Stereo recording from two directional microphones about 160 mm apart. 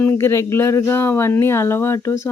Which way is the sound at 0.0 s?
15° left (ahead or behind).